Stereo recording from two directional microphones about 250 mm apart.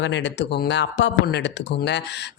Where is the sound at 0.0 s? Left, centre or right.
Left.